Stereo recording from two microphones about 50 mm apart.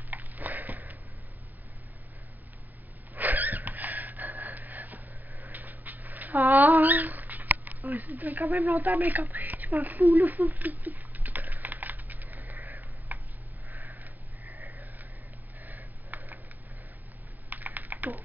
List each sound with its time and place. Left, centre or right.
0.1 s sniff: right
3.2 s gasp: right
5.4 s a sound: right
13.7 s sniff: right
15.6 s a sound: right
17.5 s typing: right